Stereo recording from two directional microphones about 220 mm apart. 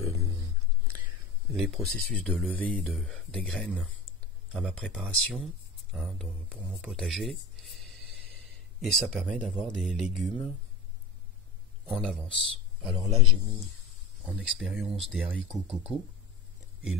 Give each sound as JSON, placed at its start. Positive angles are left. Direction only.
{"t": 1.6, "sound": "speech", "side_deg": 0}
{"t": 8.8, "sound": "speech", "side_deg": 0}
{"t": 11.8, "sound": "a man's voice", "side_deg": 5}
{"t": 12.9, "sound": "a man's voice", "side_deg": -20}
{"t": 14.2, "sound": "speech", "side_deg": 0}